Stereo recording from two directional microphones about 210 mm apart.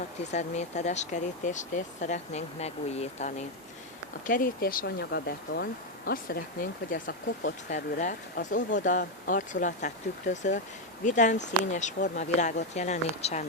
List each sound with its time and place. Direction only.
0.3 s speech: 35° left (ahead or behind)
4.3 s speech: 40° left (ahead or behind)